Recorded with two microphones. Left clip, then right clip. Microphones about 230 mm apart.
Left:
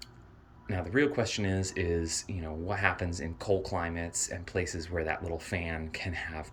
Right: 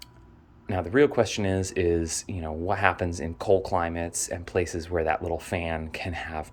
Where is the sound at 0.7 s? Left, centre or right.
Centre.